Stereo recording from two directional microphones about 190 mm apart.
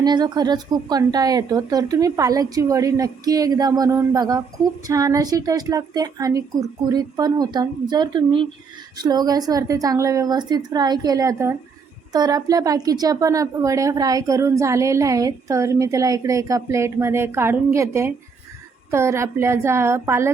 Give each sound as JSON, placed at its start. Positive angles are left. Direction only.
{"t": 0.0, "sound": "a woman's voice", "side_deg": -20}